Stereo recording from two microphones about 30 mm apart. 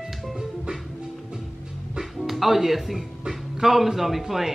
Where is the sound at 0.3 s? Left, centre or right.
Centre.